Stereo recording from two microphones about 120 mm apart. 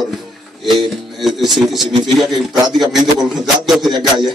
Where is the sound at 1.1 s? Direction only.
Centre (ahead or behind).